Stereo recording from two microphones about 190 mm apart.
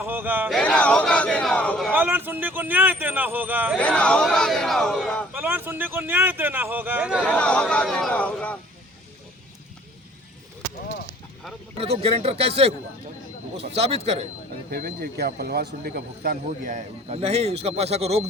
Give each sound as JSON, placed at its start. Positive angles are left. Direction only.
{"t": 0.0, "sound": "speech", "side_deg": -10}
{"t": 0.5, "sound": "speech", "side_deg": 5}
{"t": 2.0, "sound": "speech", "side_deg": -10}
{"t": 3.8, "sound": "speech", "side_deg": 5}
{"t": 5.3, "sound": "speech", "side_deg": -10}
{"t": 7.3, "sound": "speech", "side_deg": 5}
{"t": 11.8, "sound": "speech", "side_deg": -30}
{"t": 14.7, "sound": "speech", "side_deg": -55}